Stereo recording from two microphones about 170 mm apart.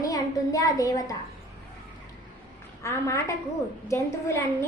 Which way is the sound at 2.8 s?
15° left (ahead or behind).